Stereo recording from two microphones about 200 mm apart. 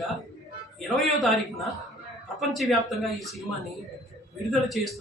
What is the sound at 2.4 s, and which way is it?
A man's voice, centre (ahead or behind).